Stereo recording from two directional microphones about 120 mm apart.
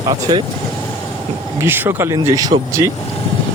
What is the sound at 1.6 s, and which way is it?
Speech, 20° right (ahead or behind).